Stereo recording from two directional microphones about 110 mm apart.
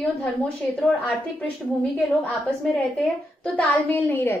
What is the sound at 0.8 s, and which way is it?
A child's voice, 10° left (ahead or behind).